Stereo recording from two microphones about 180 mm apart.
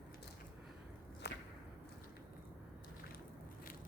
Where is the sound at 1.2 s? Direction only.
70° left (ahead or behind).